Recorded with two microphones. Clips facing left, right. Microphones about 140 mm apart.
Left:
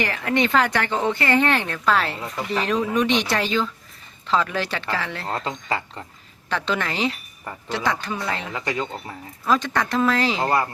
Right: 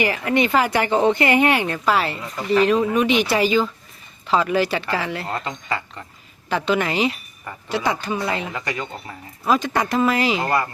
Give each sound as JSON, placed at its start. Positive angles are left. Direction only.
{"t": 0.0, "sound": "speech", "side_deg": -10}
{"t": 5.3, "sound": "speech", "side_deg": 30}
{"t": 6.7, "sound": "speech", "side_deg": -10}
{"t": 8.5, "sound": "speech", "side_deg": 30}
{"t": 9.5, "sound": "speech", "side_deg": -10}